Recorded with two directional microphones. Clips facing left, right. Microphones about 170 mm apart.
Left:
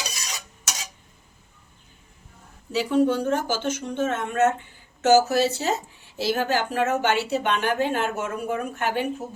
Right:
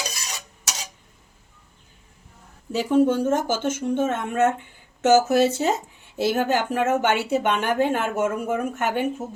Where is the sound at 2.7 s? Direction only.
50° right (ahead or behind).